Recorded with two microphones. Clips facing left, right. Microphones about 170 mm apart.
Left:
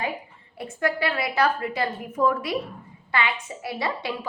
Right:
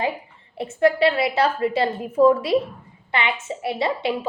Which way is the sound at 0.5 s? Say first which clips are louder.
Right 8 dB; 25° right (ahead or behind).